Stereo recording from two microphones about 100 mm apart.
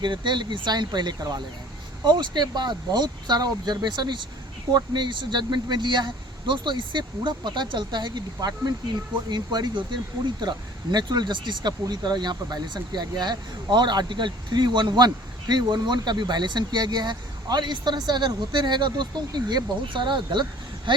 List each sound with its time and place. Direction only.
0.0 s speech: 50° right (ahead or behind)